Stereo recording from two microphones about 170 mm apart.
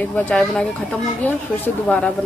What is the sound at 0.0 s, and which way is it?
Speech, 10° left (ahead or behind).